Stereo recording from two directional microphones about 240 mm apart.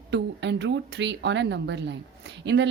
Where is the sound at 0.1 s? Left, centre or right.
Right.